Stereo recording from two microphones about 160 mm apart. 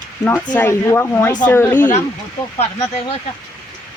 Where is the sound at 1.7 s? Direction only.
55° left (ahead or behind).